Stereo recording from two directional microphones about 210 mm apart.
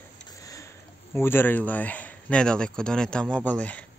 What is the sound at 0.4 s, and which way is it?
Speech, 15° left (ahead or behind).